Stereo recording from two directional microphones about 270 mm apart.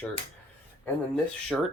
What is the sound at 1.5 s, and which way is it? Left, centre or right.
Speech, centre.